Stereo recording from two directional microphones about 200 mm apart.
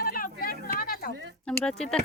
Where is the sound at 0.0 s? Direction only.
45° left (ahead or behind).